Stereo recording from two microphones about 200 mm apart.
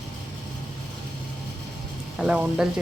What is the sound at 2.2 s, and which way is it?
Speech, 5° right (ahead or behind).